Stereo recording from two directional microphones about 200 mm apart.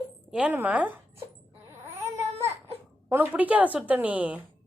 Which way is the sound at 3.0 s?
10° right (ahead or behind).